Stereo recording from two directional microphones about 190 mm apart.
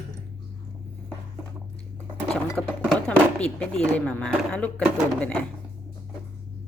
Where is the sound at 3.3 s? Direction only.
5° left (ahead or behind).